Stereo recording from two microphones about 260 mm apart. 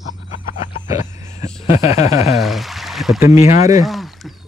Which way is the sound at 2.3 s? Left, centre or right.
Centre.